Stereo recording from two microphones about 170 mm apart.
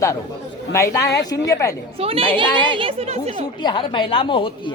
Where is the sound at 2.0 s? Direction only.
35° right (ahead or behind).